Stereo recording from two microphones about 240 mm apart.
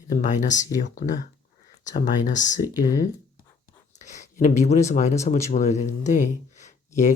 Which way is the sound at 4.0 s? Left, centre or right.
Left.